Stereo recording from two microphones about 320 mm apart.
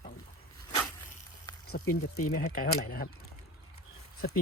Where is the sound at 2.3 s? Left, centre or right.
Left.